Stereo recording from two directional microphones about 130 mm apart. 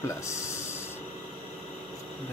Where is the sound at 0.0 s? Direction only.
20° left (ahead or behind).